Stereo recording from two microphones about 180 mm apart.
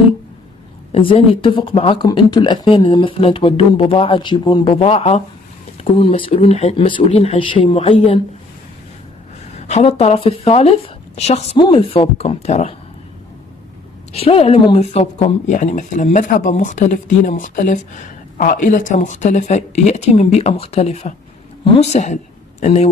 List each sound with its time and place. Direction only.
0.9 s speech: 30° left (ahead or behind)
9.6 s speech: 40° left (ahead or behind)
14.1 s speech: 35° left (ahead or behind)